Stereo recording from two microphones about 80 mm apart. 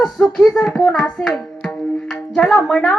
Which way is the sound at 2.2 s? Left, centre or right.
Centre.